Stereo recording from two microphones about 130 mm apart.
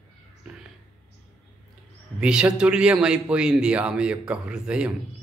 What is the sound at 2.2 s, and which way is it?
A man's voice, 5° right (ahead or behind).